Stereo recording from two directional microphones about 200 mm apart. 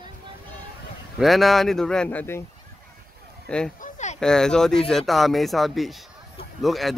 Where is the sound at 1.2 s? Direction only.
Centre (ahead or behind).